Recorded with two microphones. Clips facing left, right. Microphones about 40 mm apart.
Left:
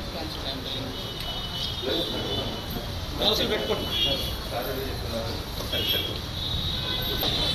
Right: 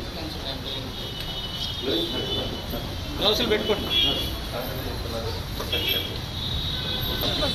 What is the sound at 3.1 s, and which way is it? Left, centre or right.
Speech, right.